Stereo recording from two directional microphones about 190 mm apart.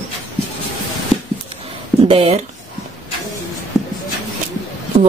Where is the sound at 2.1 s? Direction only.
30° right (ahead or behind).